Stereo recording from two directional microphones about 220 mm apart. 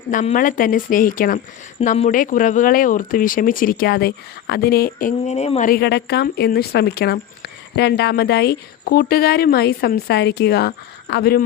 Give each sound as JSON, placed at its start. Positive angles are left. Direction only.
{"t": 0.1, "sound": "speech", "side_deg": 35}